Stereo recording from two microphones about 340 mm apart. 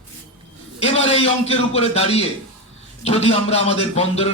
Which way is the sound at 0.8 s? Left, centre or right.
Centre.